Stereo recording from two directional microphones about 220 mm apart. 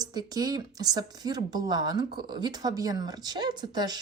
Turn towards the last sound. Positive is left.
turn(degrees=-20)  # may be behind; listen again after turning